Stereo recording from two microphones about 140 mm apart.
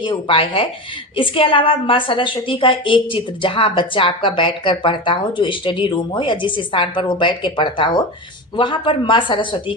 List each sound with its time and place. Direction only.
0.0 s a woman's voice: 35° left (ahead or behind)